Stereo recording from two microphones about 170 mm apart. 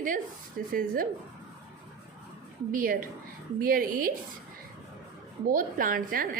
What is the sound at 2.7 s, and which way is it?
A woman's voice, 55° right (ahead or behind).